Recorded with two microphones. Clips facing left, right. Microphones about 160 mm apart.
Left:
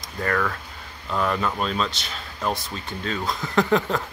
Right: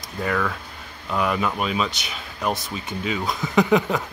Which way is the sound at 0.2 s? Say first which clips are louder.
Even; 5° right (ahead or behind).